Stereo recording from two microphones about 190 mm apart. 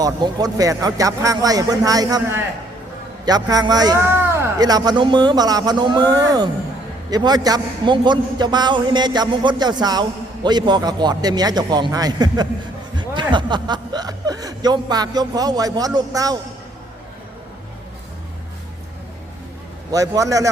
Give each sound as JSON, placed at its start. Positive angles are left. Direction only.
{"t": 0.0, "sound": "a man's voice", "side_deg": -20}
{"t": 19.9, "sound": "a man's voice", "side_deg": -15}